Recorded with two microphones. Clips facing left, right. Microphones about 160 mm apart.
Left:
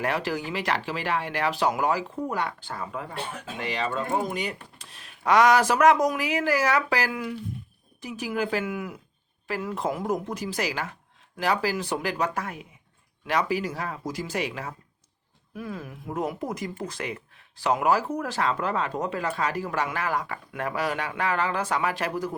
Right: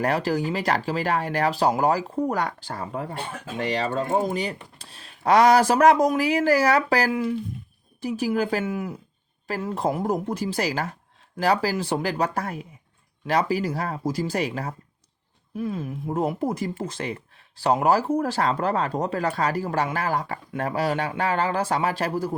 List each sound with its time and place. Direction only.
0.0 s speech: 40° right (ahead or behind)
15.5 s speech: 25° right (ahead or behind)